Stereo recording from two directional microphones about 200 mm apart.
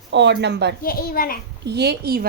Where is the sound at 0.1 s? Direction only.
60° right (ahead or behind).